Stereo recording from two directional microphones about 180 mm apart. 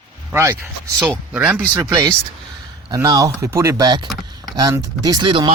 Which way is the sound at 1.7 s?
20° right (ahead or behind).